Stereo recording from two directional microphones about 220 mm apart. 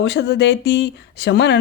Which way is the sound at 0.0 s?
50° left (ahead or behind).